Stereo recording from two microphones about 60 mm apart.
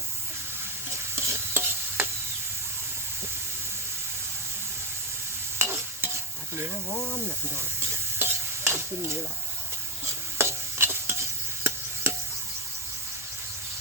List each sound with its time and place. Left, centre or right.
1.1 s stir: right
5.5 s stir: right
8.2 s stir: right
10.3 s stir: right